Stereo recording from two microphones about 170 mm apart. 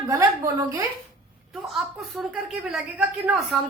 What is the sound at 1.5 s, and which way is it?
Speech, centre (ahead or behind).